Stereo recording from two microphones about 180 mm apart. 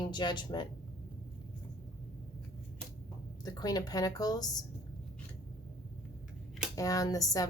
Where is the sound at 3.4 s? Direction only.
20° left (ahead or behind).